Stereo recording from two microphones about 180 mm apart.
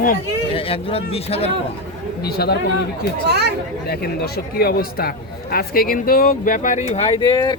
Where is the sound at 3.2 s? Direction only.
65° right (ahead or behind).